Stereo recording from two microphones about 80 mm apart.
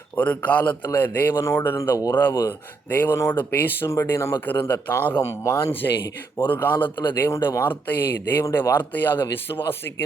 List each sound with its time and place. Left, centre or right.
0.2 s a man's voice: centre
2.0 s speech: left
2.5 s a man's voice: left
3.8 s speech: left
4.4 s a man's voice: left
5.2 s speech: left
6.4 s a man's voice: left